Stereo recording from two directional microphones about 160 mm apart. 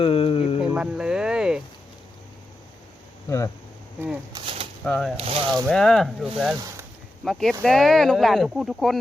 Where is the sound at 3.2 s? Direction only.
20° left (ahead or behind).